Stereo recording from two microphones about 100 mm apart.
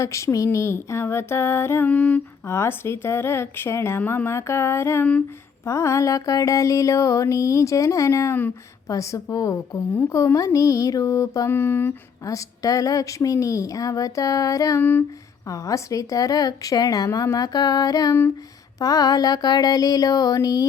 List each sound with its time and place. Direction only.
0.0 s a woman's voice: 30° left (ahead or behind); by 2.2 s 15° left (ahead or behind)
2.5 s a woman's voice: 25° left (ahead or behind)
5.6 s mantra: 30° left (ahead or behind)
12.2 s mantra: 35° left (ahead or behind)
14.8 s a woman's voice: 20° left (ahead or behind)
15.4 s mantra: 35° left (ahead or behind)